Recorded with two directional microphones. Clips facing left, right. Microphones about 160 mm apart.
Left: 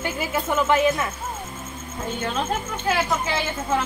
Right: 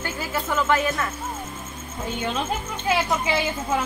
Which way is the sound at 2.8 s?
10° right (ahead or behind).